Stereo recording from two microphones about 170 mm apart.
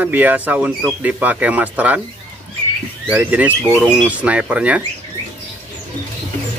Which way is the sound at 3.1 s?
10° right (ahead or behind).